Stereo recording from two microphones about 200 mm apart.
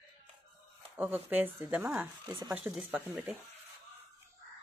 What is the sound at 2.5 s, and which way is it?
Speech, 10° right (ahead or behind).